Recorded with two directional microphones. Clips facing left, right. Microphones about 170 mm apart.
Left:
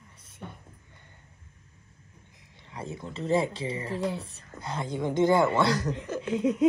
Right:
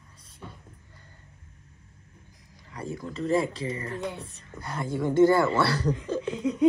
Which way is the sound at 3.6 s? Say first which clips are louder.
Left 1 dB; 30° left (ahead or behind).